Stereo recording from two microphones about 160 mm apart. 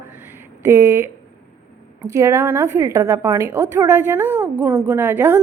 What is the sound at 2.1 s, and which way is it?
A woman's voice, 15° right (ahead or behind).